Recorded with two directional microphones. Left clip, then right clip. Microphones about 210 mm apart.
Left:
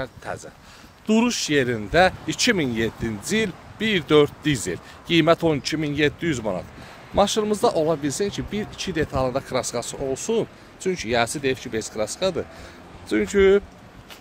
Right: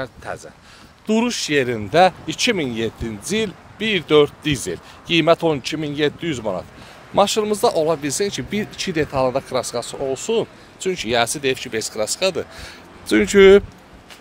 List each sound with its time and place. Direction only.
0.0 s speech: 10° right (ahead or behind); by 13.7 s 40° right (ahead or behind)